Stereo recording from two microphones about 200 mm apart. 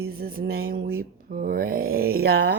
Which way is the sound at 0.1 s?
45° right (ahead or behind).